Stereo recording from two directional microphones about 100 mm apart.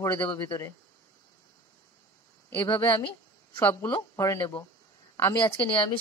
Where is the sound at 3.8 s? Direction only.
35° left (ahead or behind).